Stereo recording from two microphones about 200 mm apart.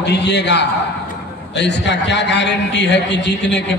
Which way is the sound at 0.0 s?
60° left (ahead or behind).